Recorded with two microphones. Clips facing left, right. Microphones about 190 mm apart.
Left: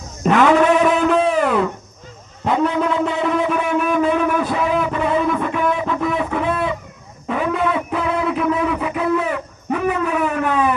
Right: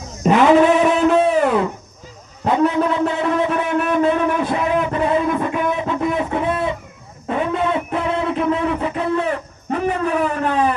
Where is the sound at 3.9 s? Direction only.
25° right (ahead or behind).